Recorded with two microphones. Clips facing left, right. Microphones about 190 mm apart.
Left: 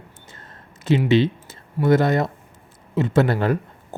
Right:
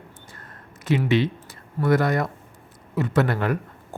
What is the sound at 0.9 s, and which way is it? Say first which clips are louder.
A man's voice: left 4 dB; 25° left (ahead or behind).